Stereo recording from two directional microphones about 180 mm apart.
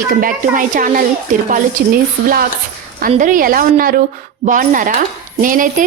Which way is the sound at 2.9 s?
50° right (ahead or behind).